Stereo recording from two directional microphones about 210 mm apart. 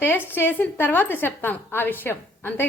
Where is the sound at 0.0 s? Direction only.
10° left (ahead or behind).